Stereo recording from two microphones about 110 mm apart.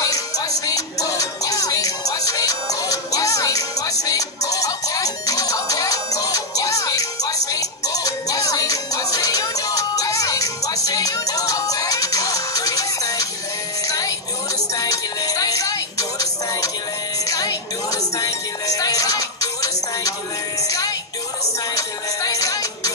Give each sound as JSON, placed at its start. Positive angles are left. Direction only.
{"t": 0.0, "sound": "music", "side_deg": 30}